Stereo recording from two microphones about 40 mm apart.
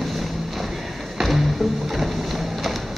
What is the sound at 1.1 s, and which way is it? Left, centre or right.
Music, centre.